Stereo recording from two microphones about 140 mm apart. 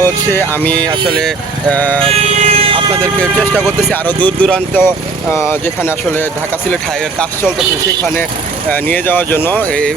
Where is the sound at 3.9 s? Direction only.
10° left (ahead or behind).